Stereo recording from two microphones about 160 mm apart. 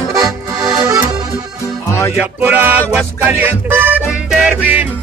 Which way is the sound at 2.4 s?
10° right (ahead or behind).